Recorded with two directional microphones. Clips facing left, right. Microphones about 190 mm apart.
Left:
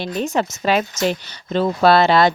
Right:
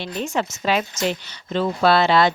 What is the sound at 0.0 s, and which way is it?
A woman's voice, 40° left (ahead or behind).